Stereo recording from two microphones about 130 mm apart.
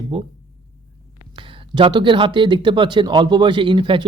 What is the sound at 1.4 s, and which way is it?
Speech, 40° right (ahead or behind).